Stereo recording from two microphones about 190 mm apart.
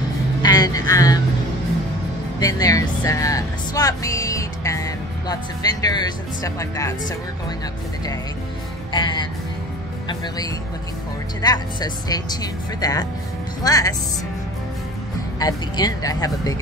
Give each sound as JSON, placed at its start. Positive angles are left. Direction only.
{"t": 0.4, "sound": "a sound", "side_deg": 20}
{"t": 2.4, "sound": "speech", "side_deg": 20}
{"t": 8.9, "sound": "speech", "side_deg": 25}
{"t": 11.4, "sound": "speech", "side_deg": 20}
{"t": 15.3, "sound": "speech", "side_deg": 20}